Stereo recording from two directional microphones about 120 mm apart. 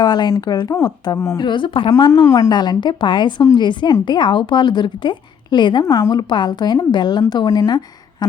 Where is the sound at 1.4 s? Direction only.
40° left (ahead or behind).